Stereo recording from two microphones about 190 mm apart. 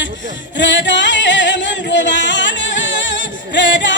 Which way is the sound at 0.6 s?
70° left (ahead or behind).